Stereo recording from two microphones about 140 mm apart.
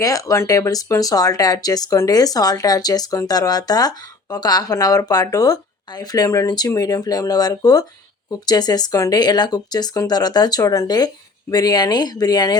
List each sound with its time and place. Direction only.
0.0 s speech: 25° left (ahead or behind)